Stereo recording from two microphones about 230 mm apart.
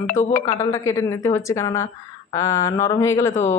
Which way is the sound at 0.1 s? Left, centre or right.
Left.